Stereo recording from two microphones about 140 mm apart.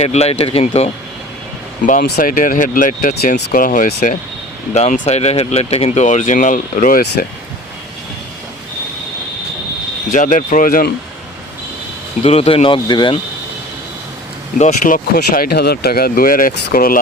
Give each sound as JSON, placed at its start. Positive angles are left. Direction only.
{"t": 0.0, "sound": "speech", "side_deg": 50}
{"t": 1.9, "sound": "speech", "side_deg": 80}
{"t": 4.7, "sound": "speech", "side_deg": 50}
{"t": 10.1, "sound": "speech", "side_deg": 65}
{"t": 12.2, "sound": "speech", "side_deg": 45}
{"t": 14.6, "sound": "speech", "side_deg": 75}